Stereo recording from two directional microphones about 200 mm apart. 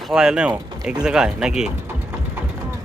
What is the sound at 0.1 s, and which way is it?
Speech, 5° right (ahead or behind).